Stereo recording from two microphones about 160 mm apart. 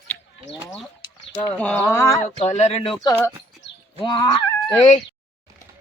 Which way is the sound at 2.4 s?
45° left (ahead or behind).